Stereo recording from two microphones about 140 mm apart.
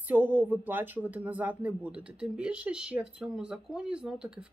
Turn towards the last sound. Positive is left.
turn(degrees=-5)  # may be behind; listen again after turning